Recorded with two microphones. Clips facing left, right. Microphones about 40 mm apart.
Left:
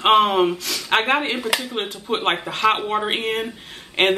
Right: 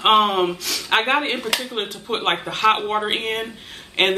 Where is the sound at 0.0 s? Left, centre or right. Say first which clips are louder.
Left 1 dB; centre.